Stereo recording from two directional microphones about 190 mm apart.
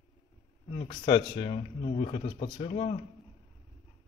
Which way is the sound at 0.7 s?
25° left (ahead or behind).